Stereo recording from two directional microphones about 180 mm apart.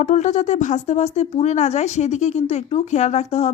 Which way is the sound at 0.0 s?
40° left (ahead or behind).